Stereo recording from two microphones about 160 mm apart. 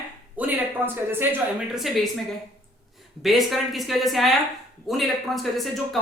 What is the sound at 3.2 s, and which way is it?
Speech, centre (ahead or behind).